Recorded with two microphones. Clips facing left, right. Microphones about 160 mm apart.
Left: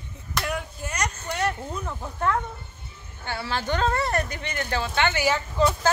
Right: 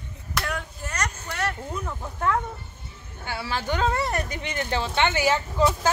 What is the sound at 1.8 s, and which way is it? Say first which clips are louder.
Speech: even; 5° right (ahead or behind).